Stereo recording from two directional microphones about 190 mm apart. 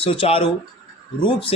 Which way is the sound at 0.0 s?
30° left (ahead or behind).